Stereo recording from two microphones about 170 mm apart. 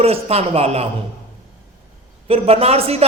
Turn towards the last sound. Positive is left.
turn(degrees=-35)  # may be behind; listen again after turning